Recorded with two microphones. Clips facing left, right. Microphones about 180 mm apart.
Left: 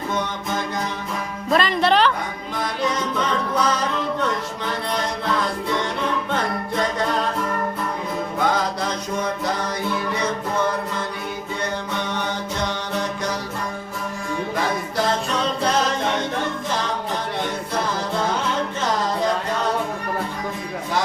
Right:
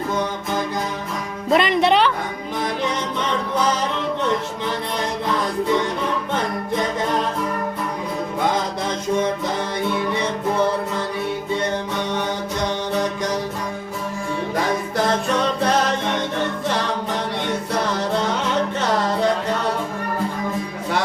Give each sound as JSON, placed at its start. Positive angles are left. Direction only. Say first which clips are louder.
{"t": 1.5, "sound": "speech", "louder": "right 2 dB", "side_deg": -20}